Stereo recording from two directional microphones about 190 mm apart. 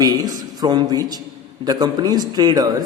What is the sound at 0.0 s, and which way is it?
A man's voice, 20° right (ahead or behind).